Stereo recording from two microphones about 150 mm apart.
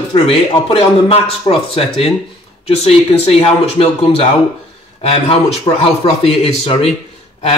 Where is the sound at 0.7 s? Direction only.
40° left (ahead or behind).